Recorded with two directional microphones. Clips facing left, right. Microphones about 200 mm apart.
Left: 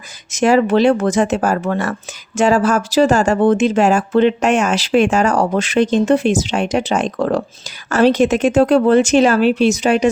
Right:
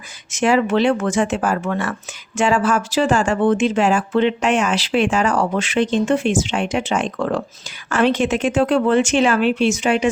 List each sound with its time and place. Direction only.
0.3 s speech: 40° left (ahead or behind)